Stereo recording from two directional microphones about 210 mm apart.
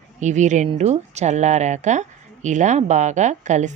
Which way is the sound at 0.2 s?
35° right (ahead or behind).